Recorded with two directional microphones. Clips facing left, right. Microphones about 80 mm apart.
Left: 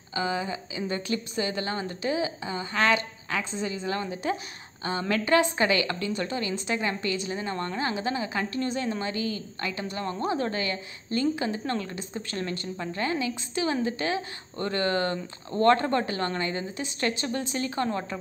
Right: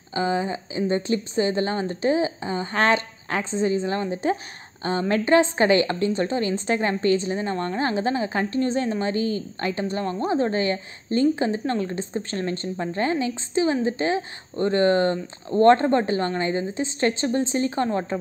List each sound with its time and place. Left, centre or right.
0.1 s a woman's voice: right